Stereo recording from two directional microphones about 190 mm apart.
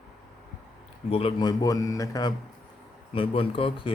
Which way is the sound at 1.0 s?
30° left (ahead or behind).